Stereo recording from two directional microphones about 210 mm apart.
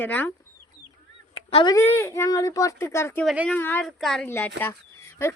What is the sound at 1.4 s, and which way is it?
Speech, 20° left (ahead or behind).